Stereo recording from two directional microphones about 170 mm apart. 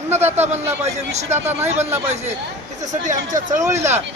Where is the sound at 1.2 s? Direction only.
40° right (ahead or behind).